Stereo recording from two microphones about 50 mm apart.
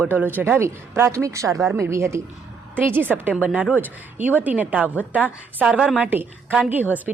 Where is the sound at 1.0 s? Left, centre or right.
Right.